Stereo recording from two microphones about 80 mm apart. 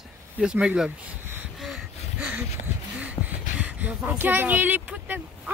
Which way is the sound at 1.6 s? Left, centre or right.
Centre.